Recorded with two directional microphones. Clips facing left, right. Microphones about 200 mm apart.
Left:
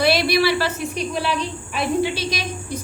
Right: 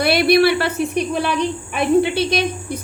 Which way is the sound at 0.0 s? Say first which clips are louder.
Right 4 dB; 55° right (ahead or behind).